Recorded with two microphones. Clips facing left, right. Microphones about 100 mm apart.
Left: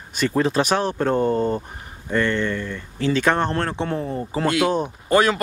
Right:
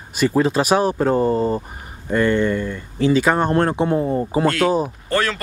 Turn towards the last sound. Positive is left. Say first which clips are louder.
# left 3 dB
turn(degrees=15)  # may be behind; listen again after turning